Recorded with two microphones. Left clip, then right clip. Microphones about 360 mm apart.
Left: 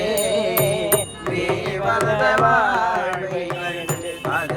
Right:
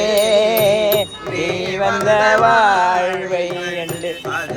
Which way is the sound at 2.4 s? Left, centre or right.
Right.